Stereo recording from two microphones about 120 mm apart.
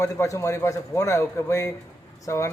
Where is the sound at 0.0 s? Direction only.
25° left (ahead or behind).